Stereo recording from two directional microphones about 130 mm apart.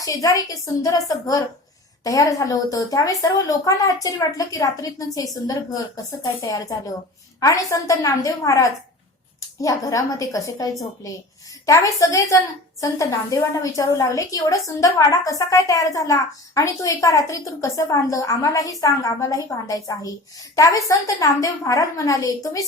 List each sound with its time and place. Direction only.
0.0 s a woman's voice: 25° left (ahead or behind)